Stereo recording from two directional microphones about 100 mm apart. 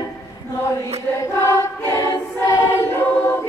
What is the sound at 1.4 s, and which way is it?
Choir, 30° left (ahead or behind).